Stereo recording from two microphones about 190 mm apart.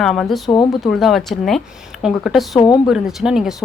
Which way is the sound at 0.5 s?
25° left (ahead or behind).